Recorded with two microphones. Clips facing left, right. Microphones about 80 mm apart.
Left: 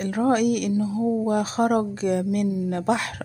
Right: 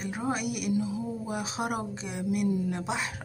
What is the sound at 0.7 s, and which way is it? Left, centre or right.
Speech, left.